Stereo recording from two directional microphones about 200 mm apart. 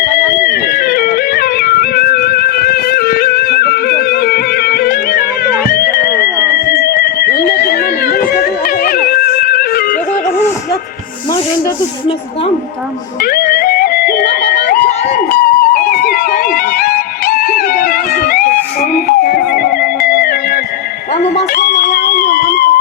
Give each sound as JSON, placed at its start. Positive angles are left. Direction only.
{"t": 0.4, "sound": "music", "side_deg": 50}
{"t": 6.2, "sound": "music", "side_deg": -15}
{"t": 6.7, "sound": "music", "side_deg": 50}
{"t": 13.2, "sound": "music", "side_deg": 50}
{"t": 21.3, "sound": "a sound", "side_deg": 55}